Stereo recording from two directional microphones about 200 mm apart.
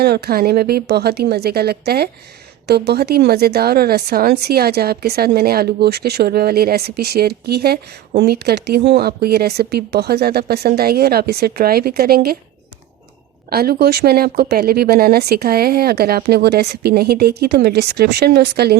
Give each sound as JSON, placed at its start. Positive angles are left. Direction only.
{"t": 0.0, "sound": "speech", "side_deg": -50}
{"t": 13.5, "sound": "speech", "side_deg": -50}